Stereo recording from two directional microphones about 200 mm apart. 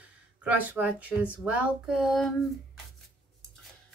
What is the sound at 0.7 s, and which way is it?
Speech, 10° right (ahead or behind).